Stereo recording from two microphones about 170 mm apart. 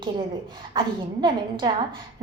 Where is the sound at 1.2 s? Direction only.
25° right (ahead or behind).